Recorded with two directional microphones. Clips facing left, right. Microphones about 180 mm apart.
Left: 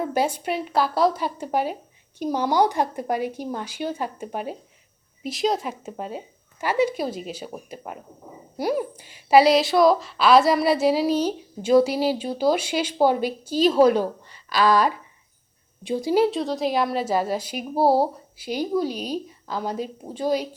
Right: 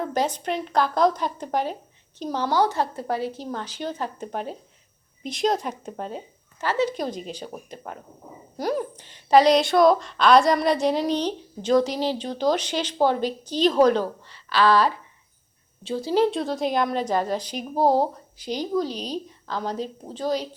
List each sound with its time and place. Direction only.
0.0 s a woman's voice: 10° left (ahead or behind)